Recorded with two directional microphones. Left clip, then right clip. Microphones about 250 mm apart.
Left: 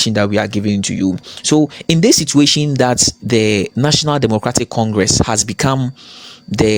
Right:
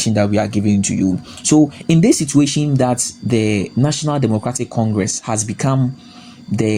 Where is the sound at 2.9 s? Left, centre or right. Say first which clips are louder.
Left 5 dB; left.